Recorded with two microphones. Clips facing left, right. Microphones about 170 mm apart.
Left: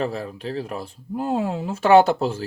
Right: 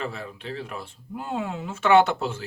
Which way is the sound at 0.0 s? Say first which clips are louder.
Left 7 dB; 40° left (ahead or behind).